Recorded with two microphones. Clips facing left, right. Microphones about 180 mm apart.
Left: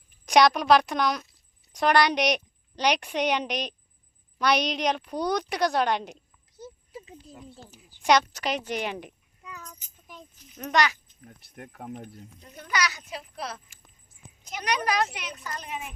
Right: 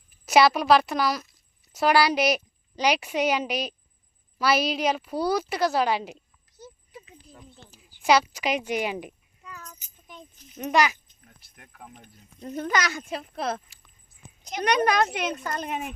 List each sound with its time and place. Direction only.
0.3 s a woman's voice: 5° right (ahead or behind)
6.6 s a sound: 25° left (ahead or behind)
7.8 s a woman's voice: 5° right (ahead or behind)
9.4 s a sound: 10° left (ahead or behind)
10.1 s keys jangling: 5° left (ahead or behind)
10.6 s speech: 10° right (ahead or behind)
11.3 s speech: 50° left (ahead or behind)
12.4 s speech: 45° right (ahead or behind)
14.6 s speech: 50° right (ahead or behind)